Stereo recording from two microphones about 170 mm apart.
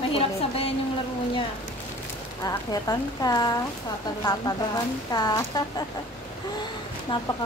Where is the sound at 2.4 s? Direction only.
20° left (ahead or behind).